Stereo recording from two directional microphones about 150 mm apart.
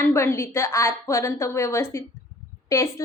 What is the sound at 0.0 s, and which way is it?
A woman's voice, 15° left (ahead or behind).